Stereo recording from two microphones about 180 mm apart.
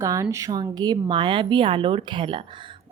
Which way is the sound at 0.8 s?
25° right (ahead or behind).